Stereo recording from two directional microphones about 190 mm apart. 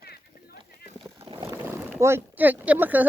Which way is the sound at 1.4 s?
15° right (ahead or behind).